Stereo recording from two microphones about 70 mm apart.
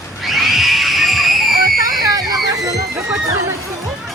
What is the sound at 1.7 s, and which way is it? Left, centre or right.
Music, right.